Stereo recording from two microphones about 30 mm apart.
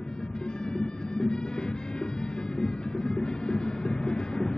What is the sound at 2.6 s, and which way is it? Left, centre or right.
Music, left.